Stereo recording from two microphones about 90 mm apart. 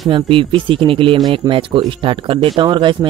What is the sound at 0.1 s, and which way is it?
Speech, 75° right (ahead or behind).